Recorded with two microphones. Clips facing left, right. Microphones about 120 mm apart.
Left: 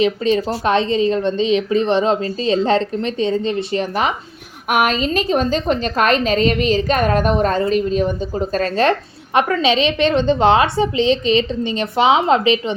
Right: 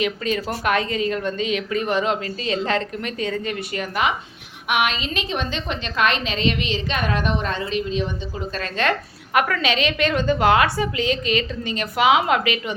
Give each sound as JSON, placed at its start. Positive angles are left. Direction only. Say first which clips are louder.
{"t": 0.0, "sound": "a woman's voice", "louder": "left 7 dB", "side_deg": 30}
{"t": 4.7, "sound": "a woman's voice", "louder": "left 6 dB", "side_deg": 40}